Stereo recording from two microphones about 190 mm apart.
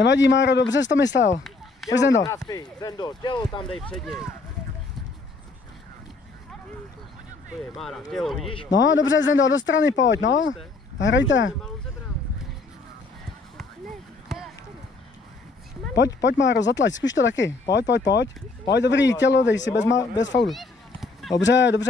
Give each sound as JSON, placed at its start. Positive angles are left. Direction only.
{"t": 0.0, "sound": "speech", "side_deg": 70}
{"t": 2.2, "sound": "speech", "side_deg": 20}
{"t": 3.6, "sound": "speech", "side_deg": 0}
{"t": 7.7, "sound": "speech", "side_deg": 0}
{"t": 8.5, "sound": "speech", "side_deg": 25}
{"t": 8.7, "sound": "speech", "side_deg": 80}
{"t": 16.2, "sound": "speech", "side_deg": 70}
{"t": 20.4, "sound": "a sound", "side_deg": 0}
{"t": 21.4, "sound": "speech", "side_deg": 70}